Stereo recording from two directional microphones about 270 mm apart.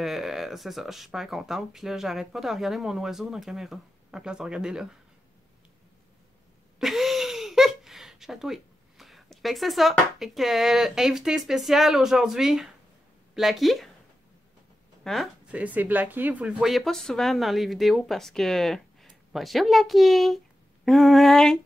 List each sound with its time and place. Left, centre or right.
0.0 s speech: centre
6.8 s speech: centre
15.0 s speech: centre